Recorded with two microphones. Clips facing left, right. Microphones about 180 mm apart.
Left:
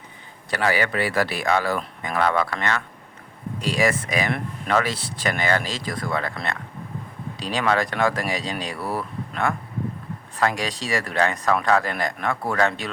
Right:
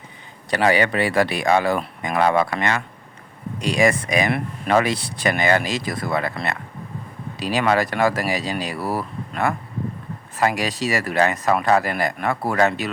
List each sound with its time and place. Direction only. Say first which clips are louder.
0.5 s speech: right 4 dB; 20° right (ahead or behind); by 12.9 s 5° right (ahead or behind)